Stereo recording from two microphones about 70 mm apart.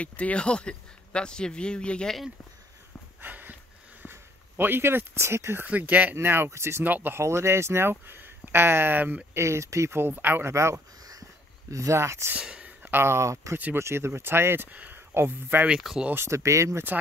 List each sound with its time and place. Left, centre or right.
0.0 s speech: centre
3.2 s a sound: right
4.0 s speech: right
5.7 s speech: right
6.1 s speech: right
6.8 s speech: right
7.2 s speech: right
9.3 s speech: right
10.5 s speech: right
12.4 s a sound: centre
12.8 s speech: right
15.8 s speech: centre
16.3 s speech: right